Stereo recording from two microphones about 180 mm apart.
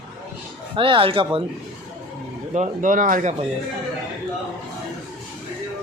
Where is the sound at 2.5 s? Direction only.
45° right (ahead or behind).